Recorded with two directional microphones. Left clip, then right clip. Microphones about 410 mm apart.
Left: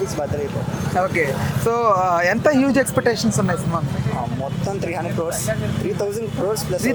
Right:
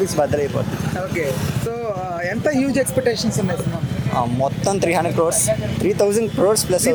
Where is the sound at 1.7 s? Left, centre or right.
Centre.